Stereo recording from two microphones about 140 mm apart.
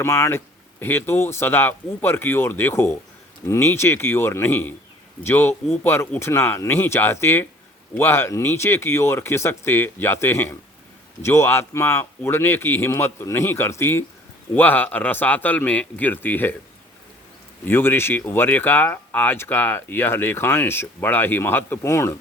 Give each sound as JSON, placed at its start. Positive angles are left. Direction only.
{"t": 0.0, "sound": "speech", "side_deg": 20}
{"t": 17.7, "sound": "speech", "side_deg": 15}